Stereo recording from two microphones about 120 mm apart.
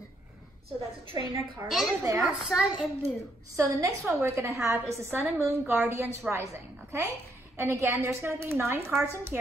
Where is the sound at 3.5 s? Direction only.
25° right (ahead or behind).